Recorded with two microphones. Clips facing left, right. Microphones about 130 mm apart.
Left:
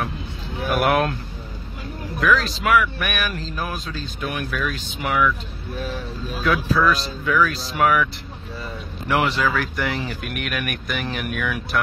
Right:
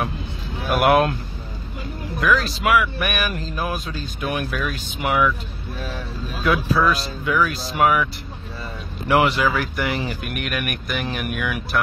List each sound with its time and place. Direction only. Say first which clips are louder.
0.7 s speech: right 3 dB; 10° right (ahead or behind)
2.1 s speech: even; 5° right (ahead or behind)
6.4 s speech: even; 10° right (ahead or behind)
9.1 s speech: right 3 dB; 10° right (ahead or behind)